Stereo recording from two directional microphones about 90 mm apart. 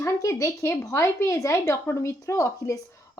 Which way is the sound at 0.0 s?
40° left (ahead or behind).